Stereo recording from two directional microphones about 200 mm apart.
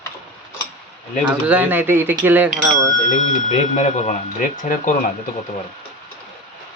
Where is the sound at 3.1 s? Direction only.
35° left (ahead or behind).